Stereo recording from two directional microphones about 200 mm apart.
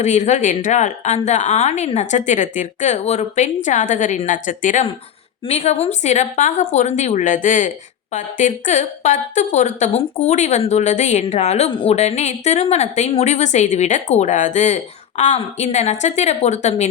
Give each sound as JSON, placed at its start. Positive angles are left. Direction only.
{"t": 0.0, "sound": "a woman's voice", "side_deg": 35}